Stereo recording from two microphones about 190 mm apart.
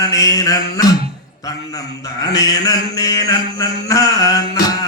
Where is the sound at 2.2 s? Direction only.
20° left (ahead or behind).